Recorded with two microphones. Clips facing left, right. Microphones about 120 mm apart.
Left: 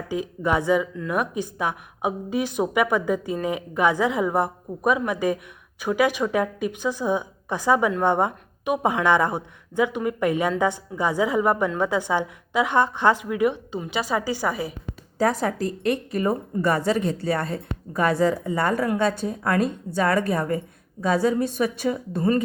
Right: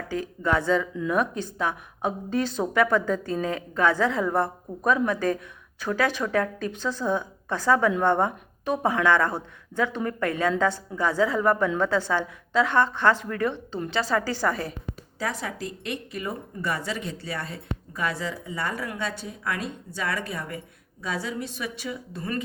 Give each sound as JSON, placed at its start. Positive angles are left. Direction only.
{"t": 0.1, "sound": "a woman's voice", "side_deg": 15}
{"t": 15.2, "sound": "speech", "side_deg": 45}